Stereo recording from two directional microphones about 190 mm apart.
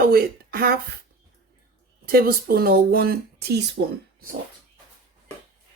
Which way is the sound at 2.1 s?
50° right (ahead or behind).